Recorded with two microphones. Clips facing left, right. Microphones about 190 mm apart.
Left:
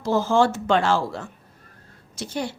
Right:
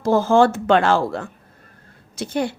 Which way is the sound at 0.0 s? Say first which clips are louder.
Right 4 dB; 50° right (ahead or behind).